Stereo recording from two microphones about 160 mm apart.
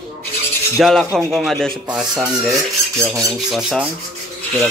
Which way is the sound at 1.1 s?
10° right (ahead or behind).